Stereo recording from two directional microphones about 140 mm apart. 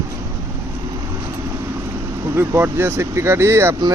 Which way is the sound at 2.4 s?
15° right (ahead or behind).